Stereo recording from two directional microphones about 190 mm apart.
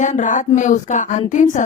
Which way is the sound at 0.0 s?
40° left (ahead or behind).